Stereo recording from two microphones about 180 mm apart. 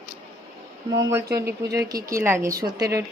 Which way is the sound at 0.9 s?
15° right (ahead or behind).